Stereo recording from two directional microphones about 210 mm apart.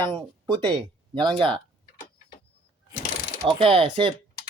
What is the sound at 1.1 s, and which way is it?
Speech, 20° right (ahead or behind).